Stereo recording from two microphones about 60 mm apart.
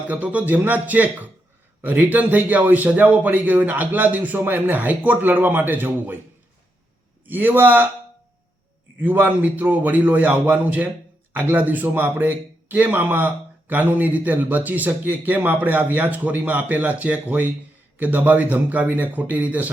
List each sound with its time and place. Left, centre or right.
0.1 s a man's voice: right
7.3 s speech: right
9.0 s a man's voice: right